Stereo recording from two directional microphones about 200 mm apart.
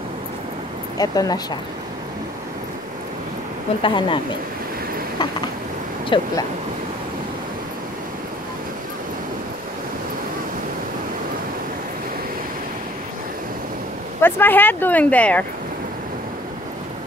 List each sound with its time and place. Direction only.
0.9 s speech: 20° left (ahead or behind)
3.8 s speech: 25° left (ahead or behind)
6.0 s speech: 25° left (ahead or behind)
14.2 s speech: 10° left (ahead or behind)